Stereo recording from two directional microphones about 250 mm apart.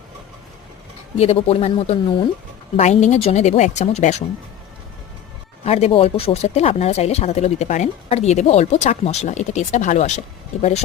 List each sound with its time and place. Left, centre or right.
1.1 s speech: left
5.6 s speech: left